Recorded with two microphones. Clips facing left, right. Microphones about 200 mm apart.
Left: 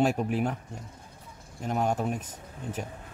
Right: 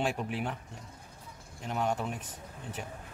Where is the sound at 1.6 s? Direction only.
45° left (ahead or behind).